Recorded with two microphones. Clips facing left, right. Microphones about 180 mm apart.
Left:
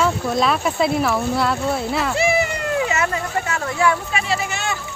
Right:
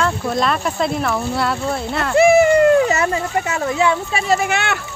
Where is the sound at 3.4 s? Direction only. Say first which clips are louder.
Right 1 dB; 20° right (ahead or behind).